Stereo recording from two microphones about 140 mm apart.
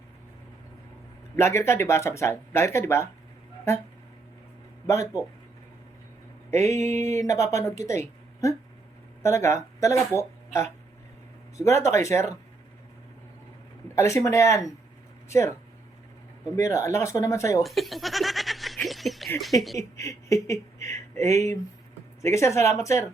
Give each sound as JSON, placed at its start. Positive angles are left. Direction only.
{"t": 1.4, "sound": "speech", "side_deg": 20}
{"t": 6.5, "sound": "mantra", "side_deg": 20}
{"t": 6.7, "sound": "a sound", "side_deg": -55}
{"t": 7.2, "sound": "speech", "side_deg": 25}
{"t": 13.9, "sound": "speech", "side_deg": 20}
{"t": 16.6, "sound": "speech", "side_deg": 20}
{"t": 17.6, "sound": "snicker", "side_deg": 0}
{"t": 20.0, "sound": "speech", "side_deg": 25}